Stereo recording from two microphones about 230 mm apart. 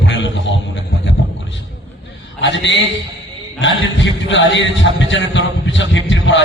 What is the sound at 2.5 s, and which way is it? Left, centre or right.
A man's voice, left.